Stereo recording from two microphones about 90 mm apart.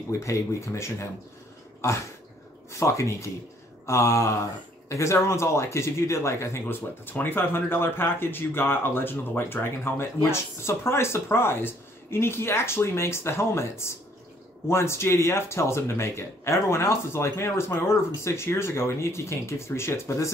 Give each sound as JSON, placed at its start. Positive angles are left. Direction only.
{"t": 0.1, "sound": "speech", "side_deg": 35}